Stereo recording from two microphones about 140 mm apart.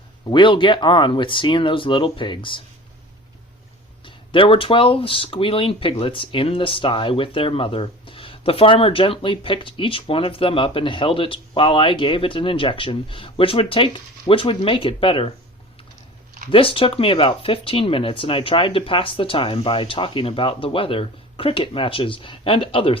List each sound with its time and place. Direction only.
0.3 s speech: 35° left (ahead or behind)
4.0 s speech: 40° left (ahead or behind)
16.5 s speech: 40° left (ahead or behind)